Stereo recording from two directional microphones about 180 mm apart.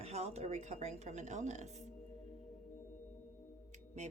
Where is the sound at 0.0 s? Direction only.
35° right (ahead or behind).